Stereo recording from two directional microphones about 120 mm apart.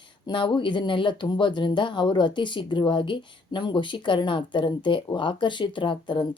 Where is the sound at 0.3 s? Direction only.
45° left (ahead or behind).